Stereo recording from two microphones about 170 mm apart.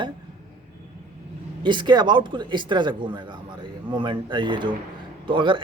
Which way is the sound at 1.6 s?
25° right (ahead or behind).